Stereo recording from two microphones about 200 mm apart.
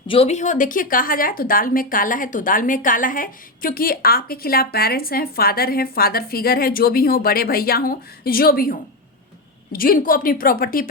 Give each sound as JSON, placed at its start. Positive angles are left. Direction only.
{"t": 0.1, "sound": "a woman's voice", "side_deg": 30}
{"t": 9.7, "sound": "a woman's voice", "side_deg": 45}